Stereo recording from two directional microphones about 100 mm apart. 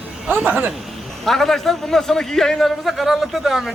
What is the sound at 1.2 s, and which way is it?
A man's voice, 5° left (ahead or behind).